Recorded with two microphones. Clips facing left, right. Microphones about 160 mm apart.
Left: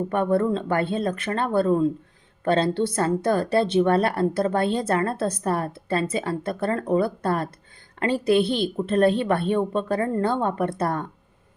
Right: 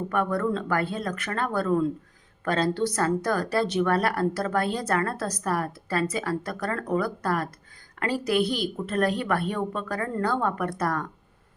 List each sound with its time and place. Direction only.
0.1 s a woman's voice: 25° left (ahead or behind)